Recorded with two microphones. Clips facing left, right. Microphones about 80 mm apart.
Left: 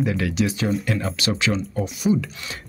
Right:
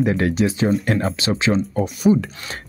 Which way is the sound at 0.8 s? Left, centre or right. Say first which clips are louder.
Right 5 dB; right.